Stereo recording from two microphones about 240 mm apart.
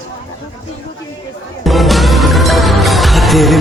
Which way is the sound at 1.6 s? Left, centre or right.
Centre.